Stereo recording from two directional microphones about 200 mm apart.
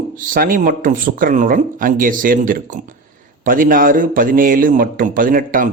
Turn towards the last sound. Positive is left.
turn(degrees=-45)  # may be behind; listen again after turning